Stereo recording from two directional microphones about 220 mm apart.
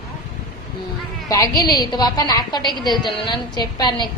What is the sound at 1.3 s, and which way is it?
A woman's voice, 15° left (ahead or behind).